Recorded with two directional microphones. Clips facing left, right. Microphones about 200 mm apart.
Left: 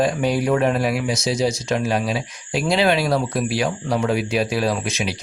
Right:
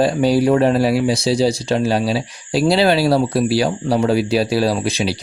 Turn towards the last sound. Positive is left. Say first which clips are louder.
# right 4 dB
turn(degrees=-35)  # may be behind; listen again after turning